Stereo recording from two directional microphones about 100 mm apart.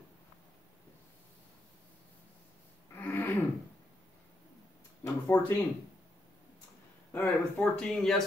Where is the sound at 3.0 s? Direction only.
20° left (ahead or behind).